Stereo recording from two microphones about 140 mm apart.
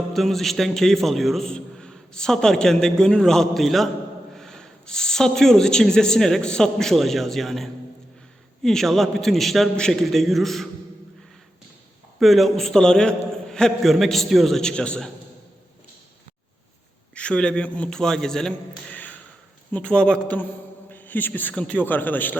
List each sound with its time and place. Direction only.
0.1 s a man's voice: centre (ahead or behind)
12.2 s a man's voice: centre (ahead or behind)
17.2 s a man's voice: 5° left (ahead or behind)
18.9 s a sound: 10° left (ahead or behind)
19.7 s a man's voice: 10° left (ahead or behind)